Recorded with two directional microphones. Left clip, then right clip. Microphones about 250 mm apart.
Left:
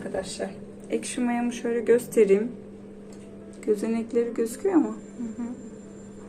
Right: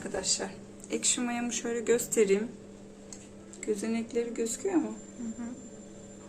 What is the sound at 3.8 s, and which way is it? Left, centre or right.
Speech, centre.